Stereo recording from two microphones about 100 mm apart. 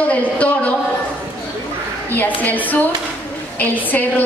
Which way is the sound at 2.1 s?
15° left (ahead or behind).